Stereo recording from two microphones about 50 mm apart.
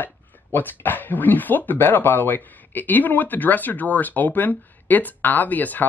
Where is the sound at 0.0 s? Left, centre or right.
Left.